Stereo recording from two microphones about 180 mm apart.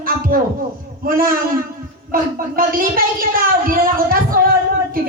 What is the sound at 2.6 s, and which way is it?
Music, 50° right (ahead or behind).